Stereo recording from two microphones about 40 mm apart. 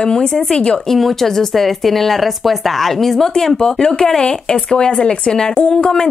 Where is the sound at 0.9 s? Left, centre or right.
Centre; by 5.9 s left.